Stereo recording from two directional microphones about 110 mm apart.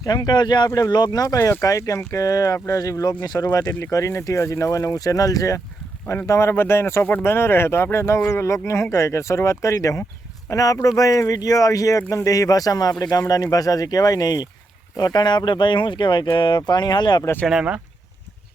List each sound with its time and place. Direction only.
0.0 s speech: 35° left (ahead or behind)
17.4 s speech: 5° right (ahead or behind)